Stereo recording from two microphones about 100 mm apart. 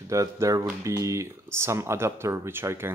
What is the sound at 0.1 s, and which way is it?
Speech, 30° right (ahead or behind).